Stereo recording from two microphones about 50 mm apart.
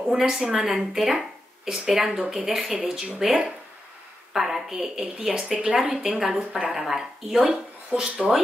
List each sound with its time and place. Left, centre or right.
0.4 s speech: centre
0.7 s a woman's voice: centre
1.7 s a woman's voice: centre
2.2 s a woman's voice: centre